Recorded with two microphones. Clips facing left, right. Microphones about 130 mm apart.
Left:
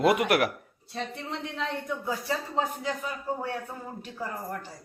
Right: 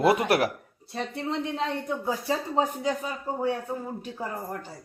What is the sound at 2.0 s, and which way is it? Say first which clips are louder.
Speech: right 3 dB; 25° right (ahead or behind).